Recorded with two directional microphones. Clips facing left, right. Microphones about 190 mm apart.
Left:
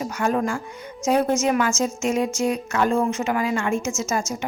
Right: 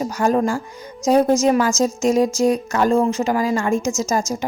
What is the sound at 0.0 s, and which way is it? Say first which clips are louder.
Speech: right 5 dB; 35° right (ahead or behind).